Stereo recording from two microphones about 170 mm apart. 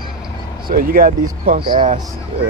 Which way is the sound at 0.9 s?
55° right (ahead or behind).